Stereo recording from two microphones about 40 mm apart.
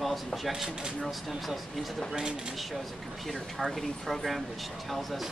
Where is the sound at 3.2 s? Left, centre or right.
Centre.